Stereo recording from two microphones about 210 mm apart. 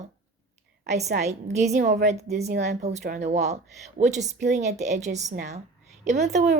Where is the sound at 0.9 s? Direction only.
35° right (ahead or behind).